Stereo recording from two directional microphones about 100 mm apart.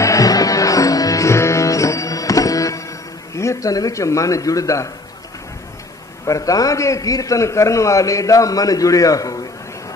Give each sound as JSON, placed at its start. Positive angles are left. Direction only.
{"t": 0.0, "sound": "music", "side_deg": 35}
{"t": 6.2, "sound": "a man's voice", "side_deg": 35}